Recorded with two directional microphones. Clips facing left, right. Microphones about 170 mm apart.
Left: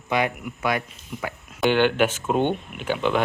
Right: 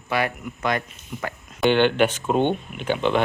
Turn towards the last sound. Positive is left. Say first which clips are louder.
# right 1 dB
turn(degrees=5)  # may be behind; listen again after turning